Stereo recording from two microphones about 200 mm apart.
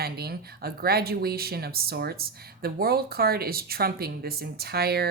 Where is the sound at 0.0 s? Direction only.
50° right (ahead or behind).